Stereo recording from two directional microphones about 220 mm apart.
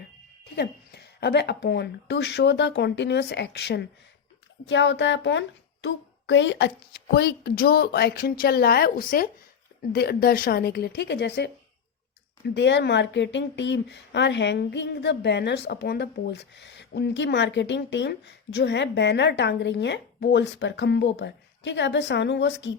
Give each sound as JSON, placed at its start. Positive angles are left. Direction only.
{"t": 0.5, "sound": "speech", "side_deg": 50}
{"t": 12.5, "sound": "speech", "side_deg": 50}